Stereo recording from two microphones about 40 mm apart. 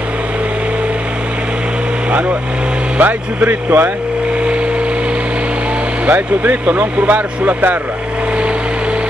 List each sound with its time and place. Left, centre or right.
3.0 s speech: right
6.0 s speech: right